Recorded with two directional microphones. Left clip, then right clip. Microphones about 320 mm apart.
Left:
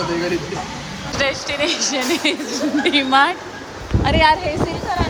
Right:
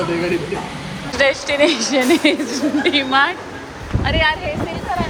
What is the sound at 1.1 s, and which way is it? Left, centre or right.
A woman's voice, centre.